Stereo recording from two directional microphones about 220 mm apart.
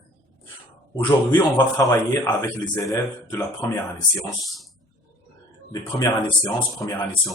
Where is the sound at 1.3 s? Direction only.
15° left (ahead or behind).